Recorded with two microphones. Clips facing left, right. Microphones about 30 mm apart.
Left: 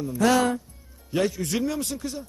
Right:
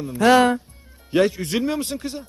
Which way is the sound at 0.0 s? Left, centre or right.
Right.